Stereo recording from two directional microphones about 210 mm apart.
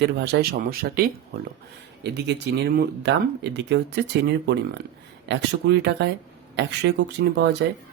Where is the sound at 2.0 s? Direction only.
55° right (ahead or behind).